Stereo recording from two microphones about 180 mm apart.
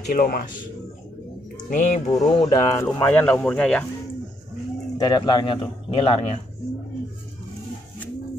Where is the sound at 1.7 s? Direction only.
45° left (ahead or behind).